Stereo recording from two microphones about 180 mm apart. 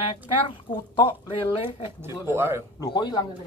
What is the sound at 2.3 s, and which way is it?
Speech, 15° right (ahead or behind).